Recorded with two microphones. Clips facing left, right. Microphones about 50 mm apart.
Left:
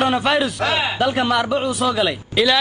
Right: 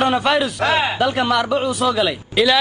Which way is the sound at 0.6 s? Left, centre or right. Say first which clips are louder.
Right 2 dB; right.